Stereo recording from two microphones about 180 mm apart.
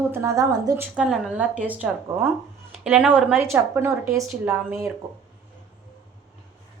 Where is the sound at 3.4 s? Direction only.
15° right (ahead or behind).